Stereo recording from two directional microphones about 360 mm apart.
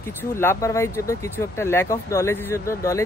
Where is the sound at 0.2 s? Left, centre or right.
Centre.